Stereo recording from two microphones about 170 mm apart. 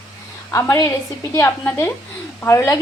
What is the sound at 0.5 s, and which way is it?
A woman's voice, 15° left (ahead or behind).